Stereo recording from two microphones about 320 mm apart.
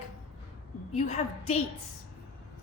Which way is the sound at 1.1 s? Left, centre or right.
Centre.